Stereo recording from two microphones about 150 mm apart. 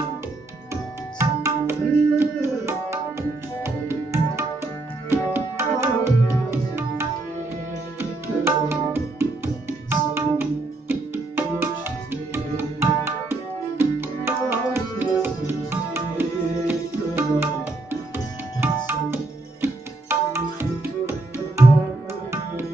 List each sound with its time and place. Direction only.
1.1 s tabla: 15° right (ahead or behind)
6.5 s music: 15° right (ahead or behind)
19.6 s tabla: 15° right (ahead or behind)